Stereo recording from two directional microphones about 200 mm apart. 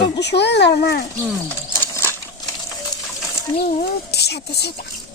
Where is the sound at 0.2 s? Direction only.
60° left (ahead or behind).